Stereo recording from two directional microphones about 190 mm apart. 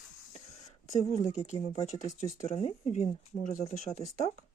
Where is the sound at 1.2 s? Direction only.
35° left (ahead or behind).